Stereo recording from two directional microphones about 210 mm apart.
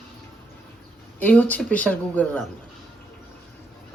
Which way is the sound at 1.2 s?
5° left (ahead or behind).